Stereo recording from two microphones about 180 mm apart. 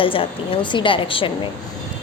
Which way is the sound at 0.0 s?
30° left (ahead or behind).